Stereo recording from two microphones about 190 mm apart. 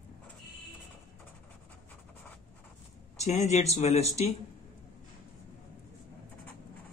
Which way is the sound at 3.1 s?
35° left (ahead or behind).